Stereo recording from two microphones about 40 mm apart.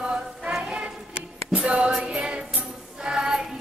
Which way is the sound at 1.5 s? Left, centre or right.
Right.